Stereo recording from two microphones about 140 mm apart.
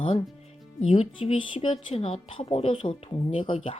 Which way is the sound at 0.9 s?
45° left (ahead or behind).